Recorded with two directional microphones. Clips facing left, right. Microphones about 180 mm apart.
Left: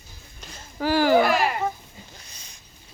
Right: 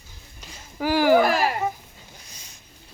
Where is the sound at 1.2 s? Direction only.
40° right (ahead or behind).